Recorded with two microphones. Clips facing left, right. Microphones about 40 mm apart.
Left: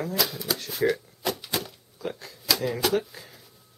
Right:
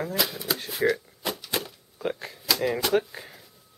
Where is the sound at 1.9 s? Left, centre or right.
Right.